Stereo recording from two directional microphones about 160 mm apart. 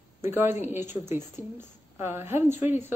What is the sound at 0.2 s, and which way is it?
A woman's voice, 15° right (ahead or behind).